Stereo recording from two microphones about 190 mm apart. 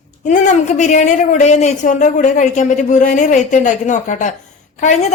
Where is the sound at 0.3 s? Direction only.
40° left (ahead or behind).